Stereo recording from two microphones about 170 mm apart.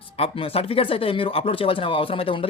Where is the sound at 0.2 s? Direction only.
35° left (ahead or behind).